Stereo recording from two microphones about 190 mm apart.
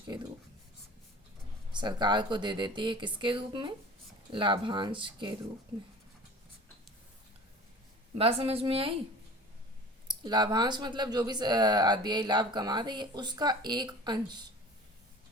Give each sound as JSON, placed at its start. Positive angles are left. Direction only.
{"t": 1.7, "sound": "speech", "side_deg": -25}
{"t": 8.2, "sound": "a woman's voice", "side_deg": -30}
{"t": 10.1, "sound": "speech", "side_deg": -20}